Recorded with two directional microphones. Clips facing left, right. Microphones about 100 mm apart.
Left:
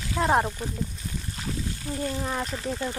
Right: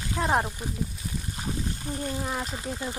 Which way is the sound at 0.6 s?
15° right (ahead or behind).